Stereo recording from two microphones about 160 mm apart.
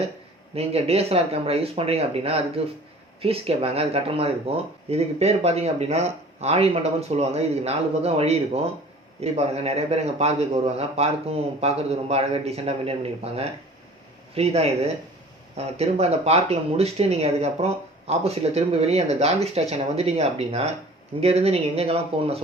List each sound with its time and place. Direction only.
0.5 s speech: 40° right (ahead or behind)